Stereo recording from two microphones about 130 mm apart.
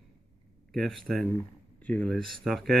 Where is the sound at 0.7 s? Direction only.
Centre (ahead or behind).